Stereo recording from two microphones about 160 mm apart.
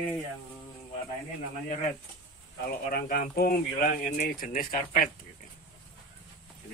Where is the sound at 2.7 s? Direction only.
65° left (ahead or behind).